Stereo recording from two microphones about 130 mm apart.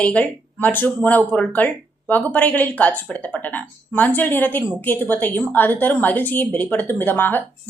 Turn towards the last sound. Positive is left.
turn(degrees=15)  # may be behind; listen again after turning